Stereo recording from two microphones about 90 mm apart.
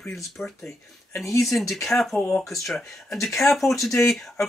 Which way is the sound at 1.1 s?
35° left (ahead or behind).